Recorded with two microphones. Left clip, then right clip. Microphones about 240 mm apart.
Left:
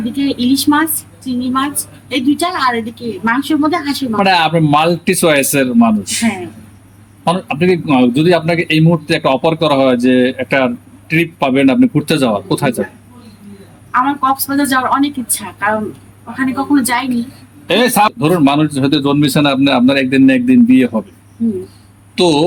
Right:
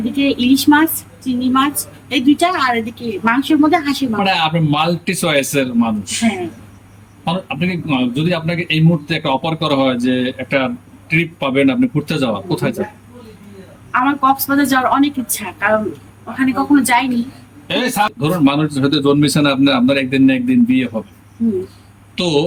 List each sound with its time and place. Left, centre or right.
0.2 s a woman's voice: centre
4.2 s a man's voice: centre
13.9 s a woman's voice: centre
16.8 s a woman's voice: centre
17.7 s a man's voice: left
22.1 s speech: centre